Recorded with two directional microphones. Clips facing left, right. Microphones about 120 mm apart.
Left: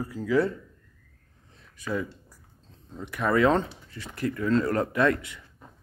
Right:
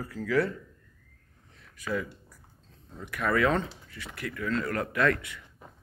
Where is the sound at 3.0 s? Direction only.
25° left (ahead or behind).